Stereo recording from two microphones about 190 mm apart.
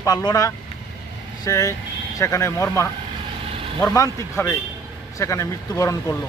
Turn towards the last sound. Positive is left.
turn(degrees=15)  # may be behind; listen again after turning